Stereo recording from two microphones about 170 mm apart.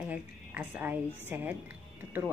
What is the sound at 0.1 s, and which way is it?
A woman's voice, 10° right (ahead or behind).